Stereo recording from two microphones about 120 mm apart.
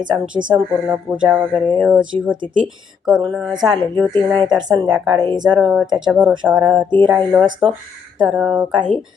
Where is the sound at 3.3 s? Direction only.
5° left (ahead or behind).